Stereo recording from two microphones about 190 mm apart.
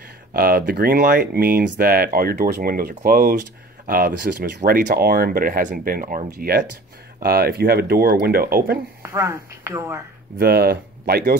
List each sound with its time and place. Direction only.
0.3 s speech: 50° right (ahead or behind)
9.0 s a woman's voice: 15° right (ahead or behind)
10.4 s speech: 55° right (ahead or behind)